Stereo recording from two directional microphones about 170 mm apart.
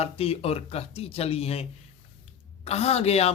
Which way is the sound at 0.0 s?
35° left (ahead or behind).